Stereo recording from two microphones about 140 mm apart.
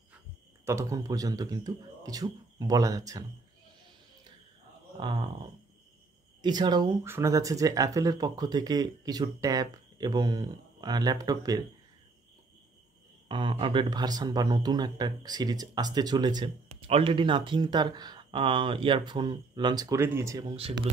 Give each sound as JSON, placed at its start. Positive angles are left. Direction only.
{"t": 0.7, "sound": "speech", "side_deg": -20}
{"t": 5.0, "sound": "speech", "side_deg": -35}
{"t": 13.3, "sound": "speech", "side_deg": -35}
{"t": 16.8, "sound": "speech", "side_deg": -40}
{"t": 20.5, "sound": "speech", "side_deg": -45}